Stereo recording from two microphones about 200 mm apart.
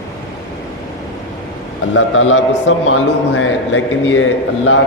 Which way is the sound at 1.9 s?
80° left.